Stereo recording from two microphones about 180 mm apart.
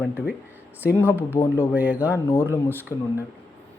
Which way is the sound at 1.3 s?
20° left (ahead or behind).